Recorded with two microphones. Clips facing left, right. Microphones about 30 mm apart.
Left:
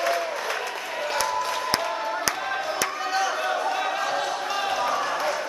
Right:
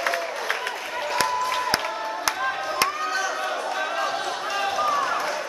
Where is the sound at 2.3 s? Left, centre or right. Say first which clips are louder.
Right 1 dB; centre.